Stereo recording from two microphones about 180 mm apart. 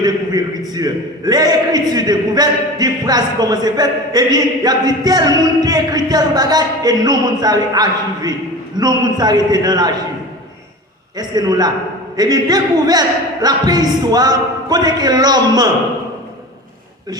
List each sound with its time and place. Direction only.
0.0 s a sound: 20° right (ahead or behind)
0.7 s a man's voice: 20° right (ahead or behind)
11.2 s a man's voice: 20° right (ahead or behind)